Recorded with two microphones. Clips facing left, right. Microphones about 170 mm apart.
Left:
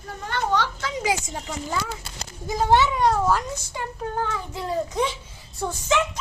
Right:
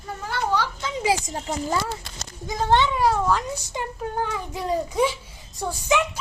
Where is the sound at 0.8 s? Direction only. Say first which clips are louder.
Right 2 dB; 30° right (ahead or behind).